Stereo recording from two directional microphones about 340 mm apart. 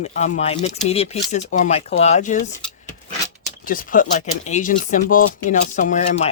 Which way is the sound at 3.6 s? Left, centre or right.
Left.